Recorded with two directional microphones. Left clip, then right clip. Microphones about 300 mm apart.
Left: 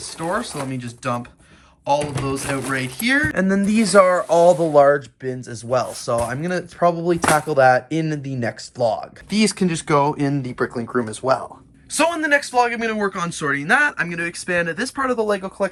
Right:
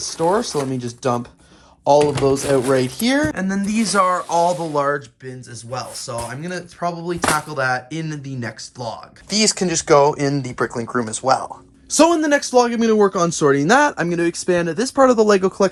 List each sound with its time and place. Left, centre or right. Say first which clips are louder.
0.2 s speech: right 6 dB; centre
2.7 s speech: right 1 dB; centre
3.3 s speech: left 3 dB; centre
11.9 s speech: right 3 dB; centre
15.1 s speech: right 6 dB; left